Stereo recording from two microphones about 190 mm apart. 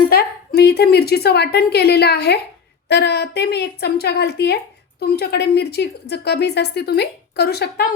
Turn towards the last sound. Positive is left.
turn(degrees=60)  # may be behind; listen again after turning